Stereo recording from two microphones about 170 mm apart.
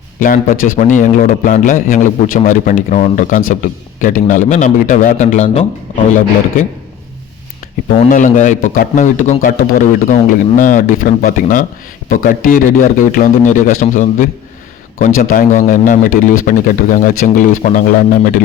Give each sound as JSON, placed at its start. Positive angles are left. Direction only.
{"t": 0.2, "sound": "a man's voice", "side_deg": 55}
{"t": 8.1, "sound": "a man's voice", "side_deg": 45}